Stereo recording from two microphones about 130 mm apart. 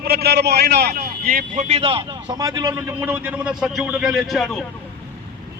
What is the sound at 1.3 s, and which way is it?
Speech, 80° right.